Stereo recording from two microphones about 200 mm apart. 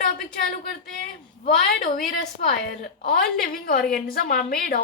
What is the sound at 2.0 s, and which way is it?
A woman's voice, 45° left (ahead or behind).